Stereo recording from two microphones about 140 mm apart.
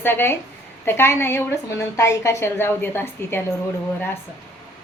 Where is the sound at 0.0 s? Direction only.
15° left (ahead or behind).